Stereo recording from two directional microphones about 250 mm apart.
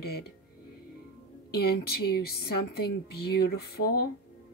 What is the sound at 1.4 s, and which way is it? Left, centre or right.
Speech, left.